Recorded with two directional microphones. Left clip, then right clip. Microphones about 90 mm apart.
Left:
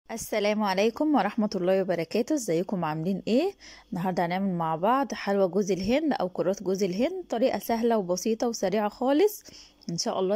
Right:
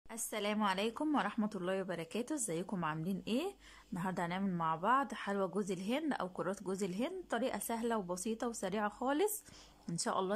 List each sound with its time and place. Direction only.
0.1 s speech: 55° left (ahead or behind)
2.3 s speech: 40° left (ahead or behind)
2.8 s speech: 50° left (ahead or behind); by 10.3 s 30° left (ahead or behind)